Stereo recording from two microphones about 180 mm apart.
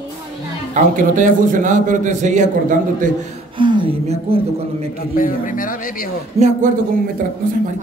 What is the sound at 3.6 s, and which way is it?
Speech, 25° right (ahead or behind).